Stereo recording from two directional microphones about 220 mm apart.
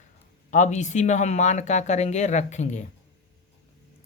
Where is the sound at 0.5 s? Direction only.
35° left (ahead or behind).